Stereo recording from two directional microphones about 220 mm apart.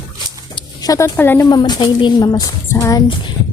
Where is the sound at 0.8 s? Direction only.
15° left (ahead or behind).